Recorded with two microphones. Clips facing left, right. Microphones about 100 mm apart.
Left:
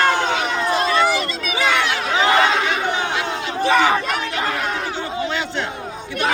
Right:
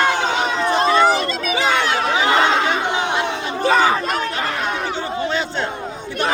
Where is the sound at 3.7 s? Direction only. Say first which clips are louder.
Even; 35° right (ahead or behind).